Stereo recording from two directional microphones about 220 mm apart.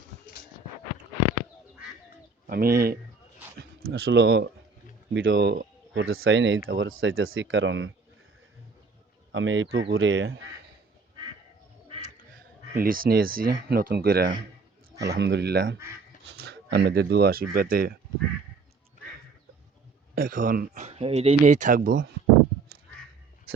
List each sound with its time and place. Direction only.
2.5 s speech: 45° right (ahead or behind)
5.1 s speech: 60° right (ahead or behind)
5.4 s speech: 45° right (ahead or behind)
9.3 s speech: 60° right (ahead or behind)
12.7 s speech: 40° right (ahead or behind)
20.1 s speech: 40° right (ahead or behind)